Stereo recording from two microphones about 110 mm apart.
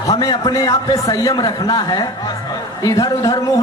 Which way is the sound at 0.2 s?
35° left (ahead or behind).